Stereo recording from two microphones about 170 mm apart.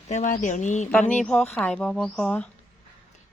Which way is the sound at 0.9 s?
5° left (ahead or behind).